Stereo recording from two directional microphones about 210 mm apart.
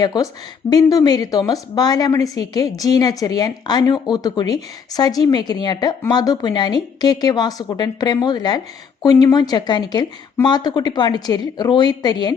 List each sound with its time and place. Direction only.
0.0 s a woman's voice: 15° left (ahead or behind)